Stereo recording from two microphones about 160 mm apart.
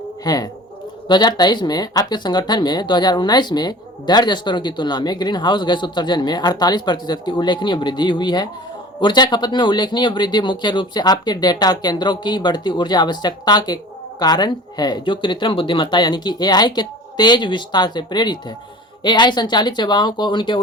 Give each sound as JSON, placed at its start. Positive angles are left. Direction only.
{"t": 0.3, "sound": "speech", "side_deg": 25}